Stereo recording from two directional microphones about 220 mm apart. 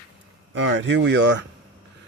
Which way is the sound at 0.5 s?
55° right (ahead or behind).